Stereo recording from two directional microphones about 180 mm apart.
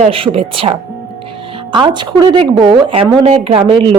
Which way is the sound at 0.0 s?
30° right (ahead or behind).